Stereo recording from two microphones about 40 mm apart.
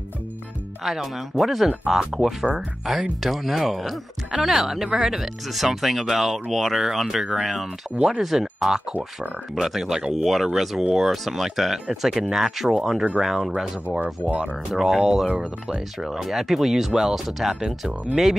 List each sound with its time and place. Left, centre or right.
0.8 s speech: centre
13.9 s speech: right